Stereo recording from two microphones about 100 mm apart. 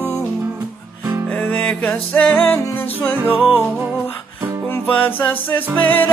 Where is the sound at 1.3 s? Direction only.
15° left (ahead or behind).